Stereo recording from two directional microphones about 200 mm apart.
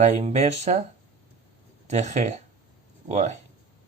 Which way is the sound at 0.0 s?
35° right (ahead or behind).